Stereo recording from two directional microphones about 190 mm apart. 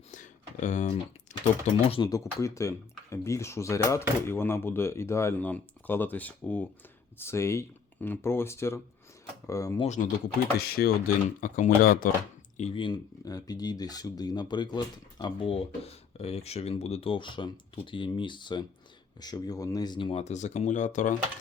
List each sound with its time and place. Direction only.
0.1 s a sound: 40° left (ahead or behind)
1.9 s speech: 20° left (ahead or behind)
9.8 s speech: 40° left (ahead or behind)
10.6 s speech: 50° left (ahead or behind)
12.5 s speech: 30° left (ahead or behind)